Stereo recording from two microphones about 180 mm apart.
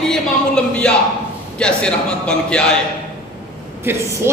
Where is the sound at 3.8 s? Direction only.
15° right (ahead or behind).